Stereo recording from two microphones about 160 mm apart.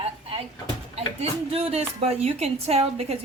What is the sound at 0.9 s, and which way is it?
A woman's voice, 40° right (ahead or behind).